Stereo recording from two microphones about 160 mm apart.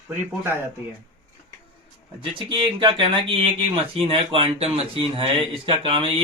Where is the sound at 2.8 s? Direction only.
35° right (ahead or behind).